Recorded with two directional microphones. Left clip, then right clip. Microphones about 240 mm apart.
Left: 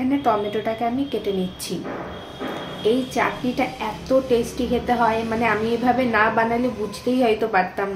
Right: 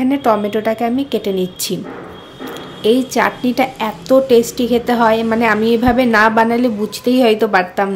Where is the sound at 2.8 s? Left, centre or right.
Right.